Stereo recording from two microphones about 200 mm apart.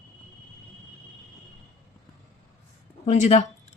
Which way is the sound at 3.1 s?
35° left (ahead or behind).